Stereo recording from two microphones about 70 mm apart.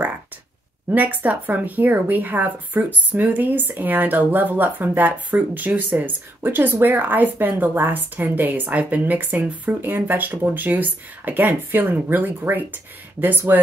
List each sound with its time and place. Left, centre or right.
0.8 s speech: right